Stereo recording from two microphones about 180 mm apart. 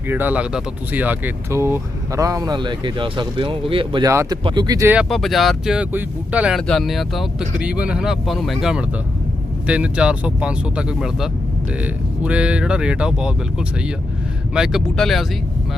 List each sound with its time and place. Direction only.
0.1 s speech: 10° right (ahead or behind); by 4.1 s 30° right (ahead or behind)
4.1 s speech: 15° right (ahead or behind)
4.9 s speech: centre (ahead or behind)